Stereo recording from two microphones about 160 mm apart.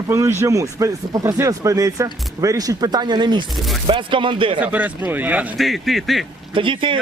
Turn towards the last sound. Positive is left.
turn(degrees=-30)  # may be behind; listen again after turning